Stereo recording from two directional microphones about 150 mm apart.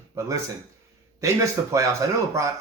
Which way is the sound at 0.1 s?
20° right (ahead or behind).